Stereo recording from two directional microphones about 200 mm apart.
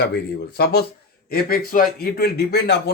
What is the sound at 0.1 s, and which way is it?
Speech, 50° left (ahead or behind).